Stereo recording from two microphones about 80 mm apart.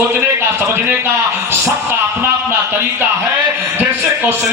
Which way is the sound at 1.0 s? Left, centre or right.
Right.